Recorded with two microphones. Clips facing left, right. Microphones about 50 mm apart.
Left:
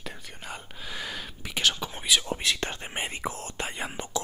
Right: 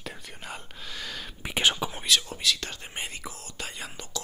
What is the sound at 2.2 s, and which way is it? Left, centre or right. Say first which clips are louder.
Whispering: left 1 dB; left.